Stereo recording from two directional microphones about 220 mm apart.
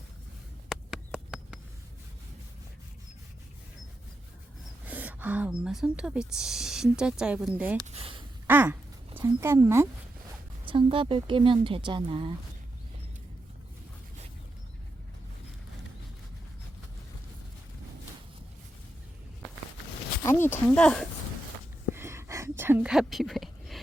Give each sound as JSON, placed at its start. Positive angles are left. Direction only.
{"t": 0.7, "sound": "a sound", "side_deg": -5}
{"t": 4.9, "sound": "speech", "side_deg": -5}
{"t": 7.9, "sound": "speech", "side_deg": -25}
{"t": 8.4, "sound": "speech", "side_deg": -10}
{"t": 10.7, "sound": "speech", "side_deg": -25}
{"t": 20.2, "sound": "speech", "side_deg": 10}
{"t": 21.9, "sound": "a sound", "side_deg": -10}